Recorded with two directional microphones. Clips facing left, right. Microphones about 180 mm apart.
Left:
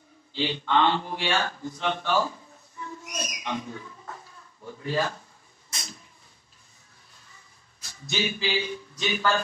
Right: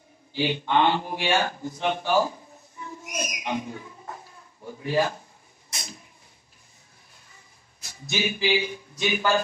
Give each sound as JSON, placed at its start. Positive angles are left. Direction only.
{"t": 0.3, "sound": "speech", "side_deg": -15}
{"t": 3.1, "sound": "owl", "side_deg": -15}
{"t": 4.6, "sound": "speech", "side_deg": -15}
{"t": 7.8, "sound": "a man's voice", "side_deg": -15}